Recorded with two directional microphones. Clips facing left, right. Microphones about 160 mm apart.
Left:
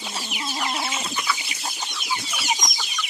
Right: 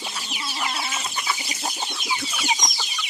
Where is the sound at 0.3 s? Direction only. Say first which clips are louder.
Left 2 dB; 50° left (ahead or behind).